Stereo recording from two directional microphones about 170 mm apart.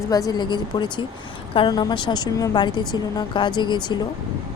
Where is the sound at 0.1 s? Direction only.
20° left (ahead or behind).